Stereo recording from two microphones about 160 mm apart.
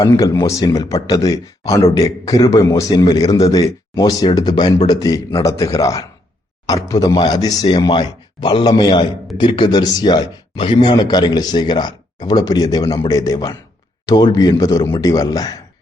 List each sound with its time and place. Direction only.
0.0 s a man's voice: 20° left (ahead or behind)